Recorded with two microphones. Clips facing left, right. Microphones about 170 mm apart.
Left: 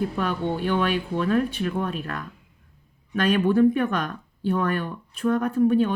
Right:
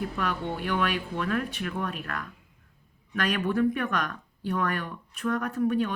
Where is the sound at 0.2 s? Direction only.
30° left (ahead or behind).